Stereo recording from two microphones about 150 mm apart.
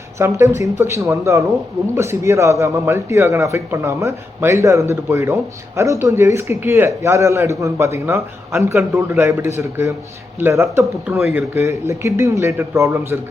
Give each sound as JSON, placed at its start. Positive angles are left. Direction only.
{"t": 0.2, "sound": "a man's voice", "side_deg": -20}